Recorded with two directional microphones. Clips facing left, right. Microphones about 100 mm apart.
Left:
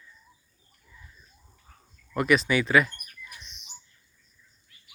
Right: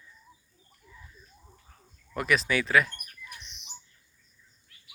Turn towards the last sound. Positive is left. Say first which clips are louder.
# left 2 dB
turn(degrees=0)  # may be behind; listen again after turning